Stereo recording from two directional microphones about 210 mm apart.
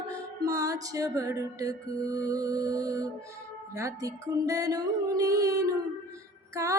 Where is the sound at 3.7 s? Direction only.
15° right (ahead or behind).